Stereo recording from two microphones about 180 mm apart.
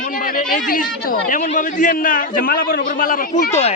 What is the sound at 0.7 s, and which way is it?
A man's voice, 50° left (ahead or behind).